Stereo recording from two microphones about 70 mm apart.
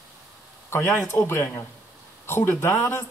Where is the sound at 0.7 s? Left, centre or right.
Left.